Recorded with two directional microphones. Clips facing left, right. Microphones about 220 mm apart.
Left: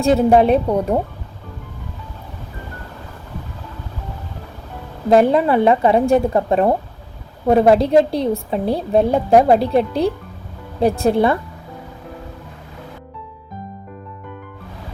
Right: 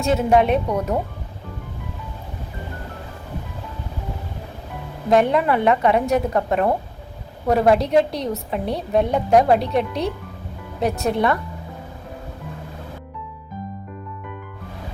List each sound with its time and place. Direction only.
0.0 s a woman's voice: 35° left (ahead or behind)
5.0 s a woman's voice: 30° left (ahead or behind)